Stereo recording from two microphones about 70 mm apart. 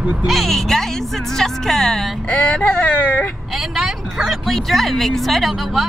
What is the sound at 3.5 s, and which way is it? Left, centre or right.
Speech, centre.